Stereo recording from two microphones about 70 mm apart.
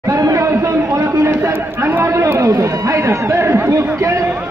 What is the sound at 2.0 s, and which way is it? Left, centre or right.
Chatter, right.